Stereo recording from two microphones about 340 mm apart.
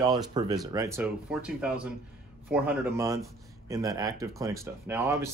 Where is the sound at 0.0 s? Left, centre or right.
Centre.